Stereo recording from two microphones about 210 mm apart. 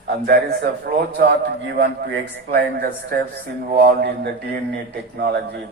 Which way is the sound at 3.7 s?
50° right (ahead or behind).